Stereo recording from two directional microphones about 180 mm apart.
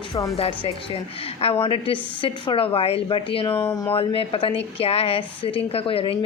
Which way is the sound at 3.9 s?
30° left (ahead or behind).